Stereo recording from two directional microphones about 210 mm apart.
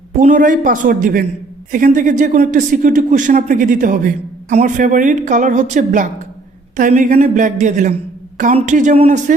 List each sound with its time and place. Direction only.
0.2 s speech: 40° right (ahead or behind)